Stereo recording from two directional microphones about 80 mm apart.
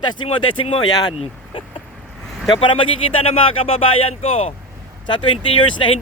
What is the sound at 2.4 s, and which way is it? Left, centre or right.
Speech, left.